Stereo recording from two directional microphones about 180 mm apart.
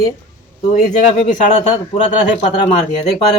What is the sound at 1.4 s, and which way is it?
A man's voice, 40° left (ahead or behind).